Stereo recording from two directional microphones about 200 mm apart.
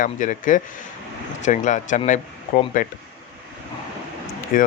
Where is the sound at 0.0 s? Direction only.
40° left (ahead or behind).